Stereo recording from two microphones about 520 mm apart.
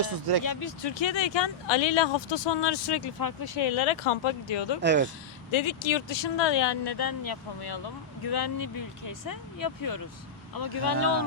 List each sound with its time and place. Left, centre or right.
0.0 s speech: right
0.4 s speech: left
4.8 s speech: centre
5.5 s speech: left